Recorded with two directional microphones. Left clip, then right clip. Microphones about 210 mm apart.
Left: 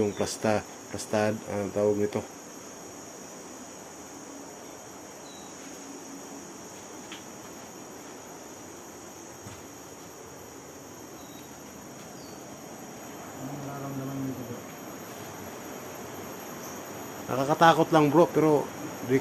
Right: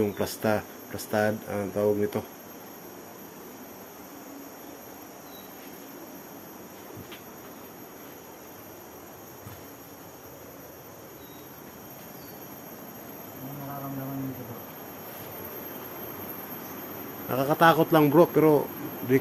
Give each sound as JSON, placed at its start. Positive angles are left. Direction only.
{"t": 0.0, "sound": "speech", "side_deg": -5}
{"t": 17.2, "sound": "speech", "side_deg": -10}